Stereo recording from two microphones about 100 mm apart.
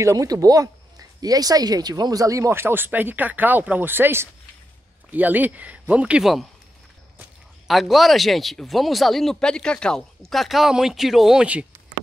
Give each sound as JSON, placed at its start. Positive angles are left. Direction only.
{"t": 0.0, "sound": "speech", "side_deg": -35}
{"t": 7.6, "sound": "speech", "side_deg": 0}